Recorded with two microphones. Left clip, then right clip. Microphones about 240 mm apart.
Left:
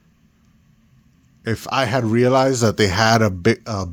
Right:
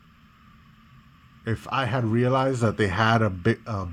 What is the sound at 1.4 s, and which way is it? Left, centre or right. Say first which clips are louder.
Speech: left 6 dB; left.